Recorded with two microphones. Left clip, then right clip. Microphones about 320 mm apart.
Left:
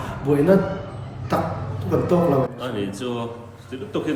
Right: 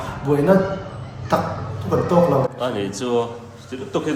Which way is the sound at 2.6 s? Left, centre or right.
Centre.